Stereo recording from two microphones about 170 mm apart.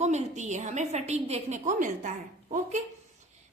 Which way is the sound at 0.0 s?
40° right (ahead or behind).